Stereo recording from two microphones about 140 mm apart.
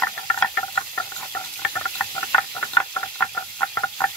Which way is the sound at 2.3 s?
10° left (ahead or behind).